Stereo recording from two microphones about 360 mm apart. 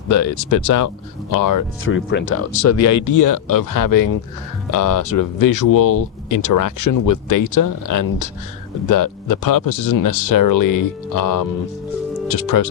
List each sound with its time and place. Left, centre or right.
0.1 s speech: left
1.3 s speech: left
1.8 s speech: left